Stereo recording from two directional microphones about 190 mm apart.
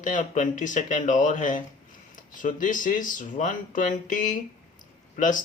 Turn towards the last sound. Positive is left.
turn(degrees=45)  # may be behind; listen again after turning